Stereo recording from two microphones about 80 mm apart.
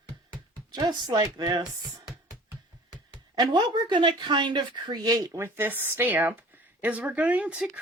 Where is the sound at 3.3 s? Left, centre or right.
Right.